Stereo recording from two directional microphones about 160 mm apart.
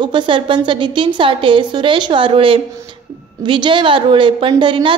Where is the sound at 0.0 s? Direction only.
30° right (ahead or behind).